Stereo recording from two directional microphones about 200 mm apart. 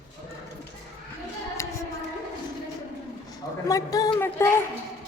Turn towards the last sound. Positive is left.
turn(degrees=10)  # may be behind; listen again after turning